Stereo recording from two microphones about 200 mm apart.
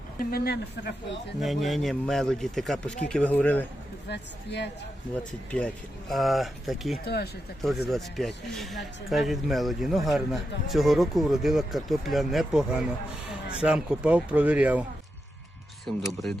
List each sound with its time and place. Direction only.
0.3 s speech: 50° left (ahead or behind)
1.4 s speech: centre (ahead or behind)
4.1 s speech: 60° left (ahead or behind)
5.5 s speech: 5° left (ahead or behind)
7.0 s speech: 55° left (ahead or behind)
7.9 s speech: centre (ahead or behind)
15.9 s speech: centre (ahead or behind)